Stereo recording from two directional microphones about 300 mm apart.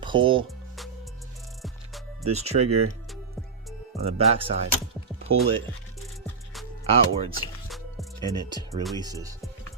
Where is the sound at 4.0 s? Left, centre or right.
Centre.